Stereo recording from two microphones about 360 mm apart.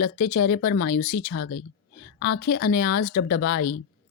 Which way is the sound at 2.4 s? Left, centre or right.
Left.